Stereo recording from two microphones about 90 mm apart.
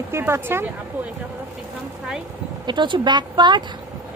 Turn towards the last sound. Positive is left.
turn(degrees=-55)  # may be behind; listen again after turning